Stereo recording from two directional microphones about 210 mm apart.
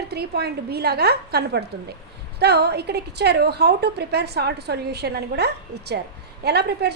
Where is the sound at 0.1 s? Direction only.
50° right (ahead or behind).